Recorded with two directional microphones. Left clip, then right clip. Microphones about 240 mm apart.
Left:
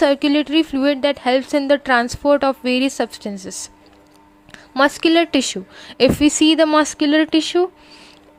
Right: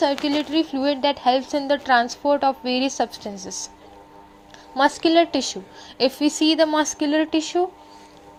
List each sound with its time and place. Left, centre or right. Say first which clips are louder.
0.1 s speech: left 6 dB; left
0.4 s a woman's voice: left 5 dB; left
4.5 s a woman's voice: left 3 dB; left